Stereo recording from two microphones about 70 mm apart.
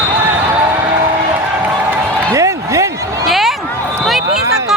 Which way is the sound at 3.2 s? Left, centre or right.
Centre.